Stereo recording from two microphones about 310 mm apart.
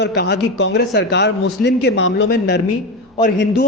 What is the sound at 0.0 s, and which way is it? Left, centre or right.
A man's voice, left.